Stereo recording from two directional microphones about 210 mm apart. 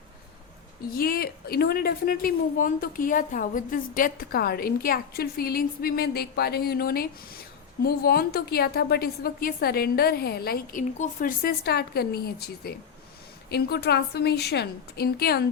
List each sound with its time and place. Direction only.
0.9 s a woman's voice: 45° left (ahead or behind)